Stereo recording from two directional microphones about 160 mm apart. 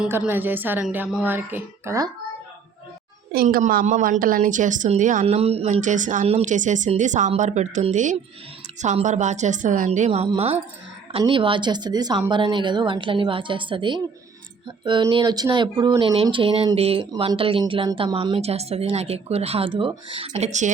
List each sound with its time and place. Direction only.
0.0 s a woman's voice: 10° right (ahead or behind)
3.3 s a woman's voice: 65° right (ahead or behind)
5.2 s a woman's voice: 40° right (ahead or behind)